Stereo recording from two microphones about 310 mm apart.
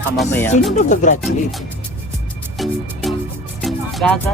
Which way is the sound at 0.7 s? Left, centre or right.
Left.